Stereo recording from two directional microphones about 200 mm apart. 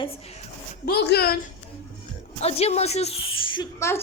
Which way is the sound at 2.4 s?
30° left (ahead or behind).